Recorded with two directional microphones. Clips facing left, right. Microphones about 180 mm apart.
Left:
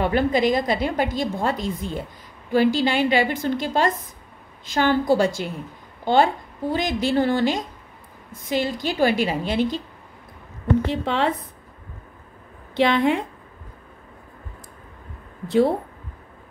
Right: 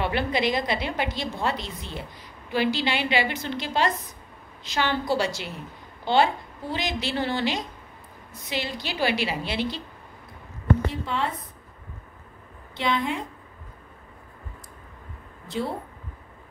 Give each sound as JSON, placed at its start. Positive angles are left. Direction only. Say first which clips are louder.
{"t": 0.0, "sound": "a woman's voice", "louder": "left 5 dB", "side_deg": 40}
{"t": 11.1, "sound": "speech", "louder": "left 6 dB", "side_deg": 75}
{"t": 12.7, "sound": "a woman's voice", "louder": "left 8 dB", "side_deg": 65}
{"t": 15.4, "sound": "a woman's voice", "louder": "left 11 dB", "side_deg": 60}